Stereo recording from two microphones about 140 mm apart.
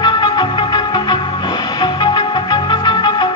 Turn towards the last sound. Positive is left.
turn(degrees=35)  # may be behind; listen again after turning